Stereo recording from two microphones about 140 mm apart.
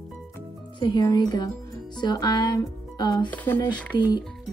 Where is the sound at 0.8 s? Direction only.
30° left (ahead or behind).